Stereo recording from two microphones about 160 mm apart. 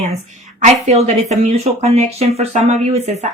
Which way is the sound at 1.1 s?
45° right (ahead or behind).